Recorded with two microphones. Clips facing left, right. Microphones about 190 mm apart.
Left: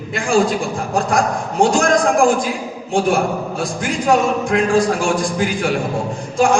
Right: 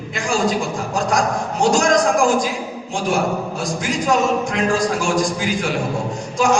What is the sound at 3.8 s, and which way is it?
A man's voice, 55° left (ahead or behind).